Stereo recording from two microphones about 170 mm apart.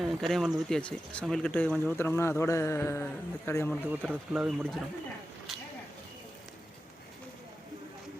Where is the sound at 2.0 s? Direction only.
15° left (ahead or behind).